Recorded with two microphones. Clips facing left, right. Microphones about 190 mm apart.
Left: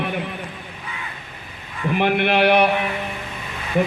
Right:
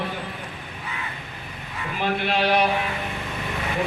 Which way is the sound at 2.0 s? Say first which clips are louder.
Left 5 dB; 65° left (ahead or behind).